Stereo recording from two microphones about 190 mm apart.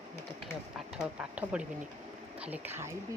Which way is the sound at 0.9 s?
5° right (ahead or behind).